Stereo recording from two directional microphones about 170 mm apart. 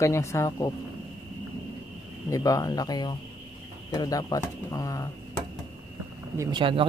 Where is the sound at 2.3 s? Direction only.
20° left (ahead or behind).